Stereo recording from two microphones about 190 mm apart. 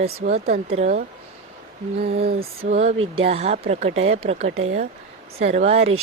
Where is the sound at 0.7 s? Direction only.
35° right (ahead or behind).